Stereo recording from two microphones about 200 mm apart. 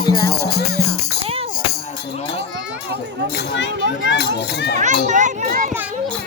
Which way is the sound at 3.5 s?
65° left (ahead or behind).